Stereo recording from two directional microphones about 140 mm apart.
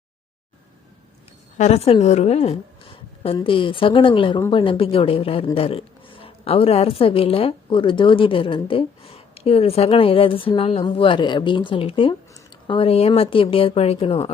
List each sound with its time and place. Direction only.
1.5 s a woman's voice: 50° left (ahead or behind)